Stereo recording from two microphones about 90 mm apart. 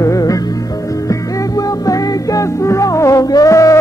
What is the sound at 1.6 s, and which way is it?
Music, 40° left (ahead or behind).